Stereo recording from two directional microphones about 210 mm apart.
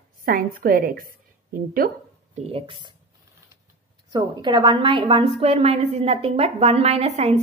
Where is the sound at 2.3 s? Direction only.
30° right (ahead or behind).